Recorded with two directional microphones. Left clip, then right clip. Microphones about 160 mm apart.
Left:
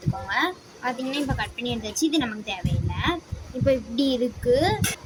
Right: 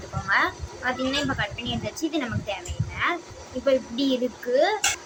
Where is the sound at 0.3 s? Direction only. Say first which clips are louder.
Right 3 dB; 50° left (ahead or behind).